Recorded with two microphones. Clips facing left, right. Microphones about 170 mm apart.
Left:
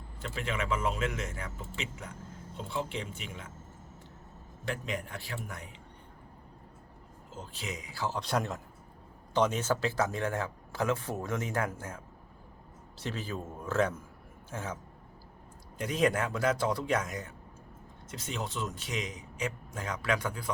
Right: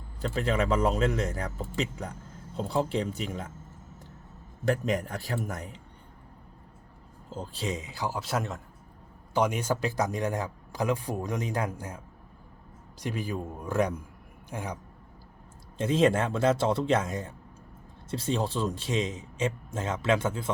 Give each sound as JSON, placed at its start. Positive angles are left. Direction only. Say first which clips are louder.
{"t": 0.3, "sound": "speech", "louder": "right 7 dB", "side_deg": -35}
{"t": 4.6, "sound": "speech", "louder": "right 9 dB", "side_deg": -40}
{"t": 7.3, "sound": "speech", "louder": "right 7 dB", "side_deg": -35}
{"t": 8.2, "sound": "speech", "louder": "even", "side_deg": 0}
{"t": 9.3, "sound": "speech", "louder": "right 1 dB", "side_deg": -10}
{"t": 15.8, "sound": "speech", "louder": "right 5 dB", "side_deg": -25}